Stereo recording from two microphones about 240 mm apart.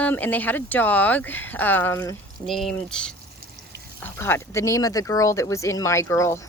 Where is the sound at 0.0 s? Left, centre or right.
Centre.